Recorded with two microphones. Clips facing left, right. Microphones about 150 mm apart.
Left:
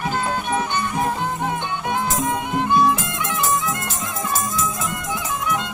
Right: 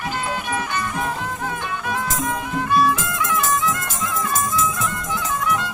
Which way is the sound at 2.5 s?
25° left (ahead or behind).